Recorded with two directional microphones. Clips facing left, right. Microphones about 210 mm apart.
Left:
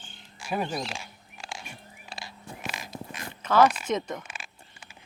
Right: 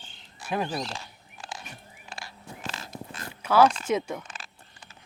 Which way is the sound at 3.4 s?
10° right (ahead or behind).